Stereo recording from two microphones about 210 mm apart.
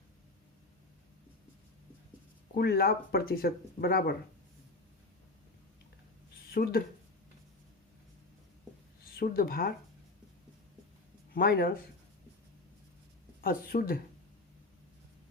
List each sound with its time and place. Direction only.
2.6 s speech: 45° left (ahead or behind)
6.5 s speech: 45° left (ahead or behind)
9.1 s speech: 45° left (ahead or behind)
11.3 s speech: 45° left (ahead or behind)
13.4 s speech: 45° left (ahead or behind)